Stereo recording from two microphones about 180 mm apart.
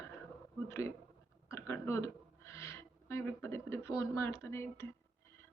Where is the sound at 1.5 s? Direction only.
15° left (ahead or behind).